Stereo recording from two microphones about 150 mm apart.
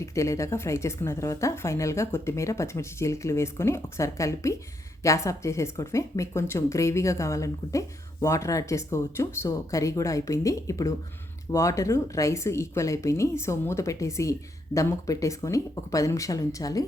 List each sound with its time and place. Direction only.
0.0 s a woman's voice: 20° left (ahead or behind)